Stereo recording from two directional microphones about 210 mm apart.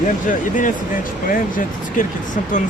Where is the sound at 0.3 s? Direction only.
40° left (ahead or behind).